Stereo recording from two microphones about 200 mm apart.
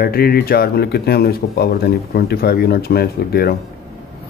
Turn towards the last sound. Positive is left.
turn(degrees=50)  # may be behind; listen again after turning